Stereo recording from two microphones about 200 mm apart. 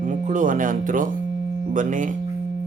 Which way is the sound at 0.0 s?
40° right (ahead or behind).